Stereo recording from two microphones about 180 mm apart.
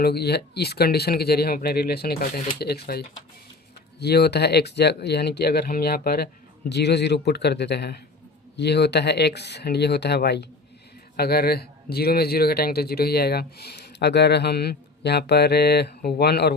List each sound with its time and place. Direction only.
0.0 s a man's voice: 65° left (ahead or behind)